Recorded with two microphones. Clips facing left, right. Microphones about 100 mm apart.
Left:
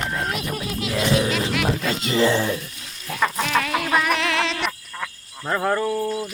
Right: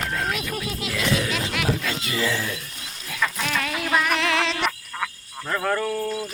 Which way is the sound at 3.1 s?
45° left (ahead or behind).